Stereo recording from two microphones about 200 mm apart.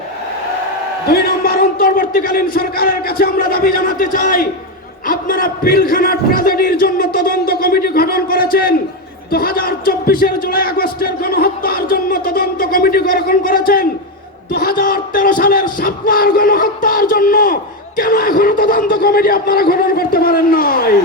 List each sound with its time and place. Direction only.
1.1 s a man's voice: 50° left (ahead or behind)